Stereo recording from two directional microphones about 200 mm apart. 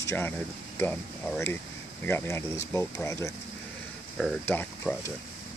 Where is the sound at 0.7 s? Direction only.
10° left (ahead or behind).